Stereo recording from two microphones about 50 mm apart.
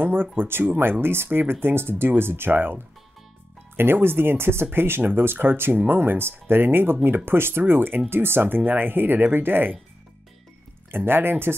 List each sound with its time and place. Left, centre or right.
0.0 s speech: right
10.9 s speech: right